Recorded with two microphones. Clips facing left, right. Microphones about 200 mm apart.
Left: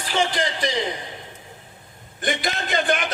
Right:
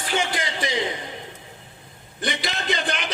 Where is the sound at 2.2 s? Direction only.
50° left (ahead or behind).